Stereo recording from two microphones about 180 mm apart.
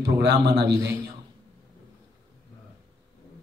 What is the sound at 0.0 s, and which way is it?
Speech, 70° right (ahead or behind).